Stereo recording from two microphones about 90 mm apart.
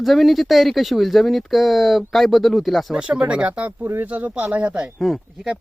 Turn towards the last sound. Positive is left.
turn(degrees=0)  # may be behind; listen again after turning